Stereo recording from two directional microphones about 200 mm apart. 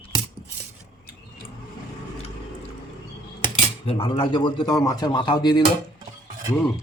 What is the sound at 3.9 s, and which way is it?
Speech, 30° left (ahead or behind).